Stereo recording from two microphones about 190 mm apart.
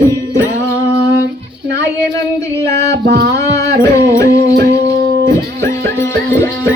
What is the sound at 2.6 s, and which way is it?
Music, 15° left (ahead or behind).